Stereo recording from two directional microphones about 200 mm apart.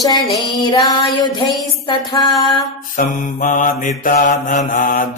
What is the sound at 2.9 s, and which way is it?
Mantra, 40° left (ahead or behind).